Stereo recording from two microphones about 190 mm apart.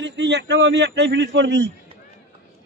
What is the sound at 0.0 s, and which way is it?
A man's voice, 70° right (ahead or behind).